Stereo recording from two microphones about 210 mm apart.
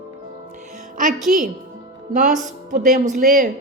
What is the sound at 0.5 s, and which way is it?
Music, 35° right (ahead or behind).